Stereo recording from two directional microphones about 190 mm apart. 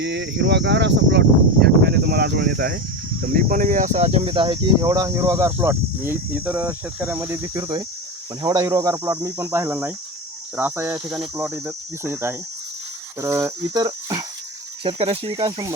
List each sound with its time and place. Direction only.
0.0 s speech: 65° right (ahead or behind); by 14.3 s 20° right (ahead or behind)
14.8 s speech: 30° right (ahead or behind)